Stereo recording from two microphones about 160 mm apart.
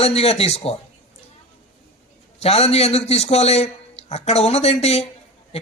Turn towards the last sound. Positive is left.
turn(degrees=40)  # may be behind; listen again after turning